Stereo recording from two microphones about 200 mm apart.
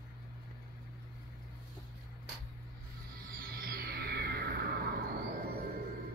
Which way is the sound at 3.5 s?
50° right (ahead or behind).